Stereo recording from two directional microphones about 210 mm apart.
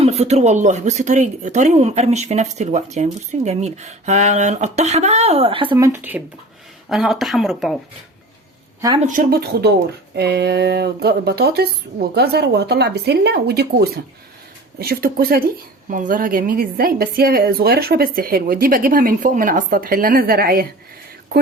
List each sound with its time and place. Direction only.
0.0 s speech: 30° right (ahead or behind)
5.7 s speech: 15° right (ahead or behind)
9.0 s a woman's voice: 40° right (ahead or behind)